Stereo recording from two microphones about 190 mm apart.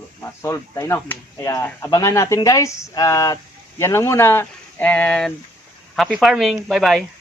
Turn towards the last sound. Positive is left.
turn(degrees=0)  # may be behind; listen again after turning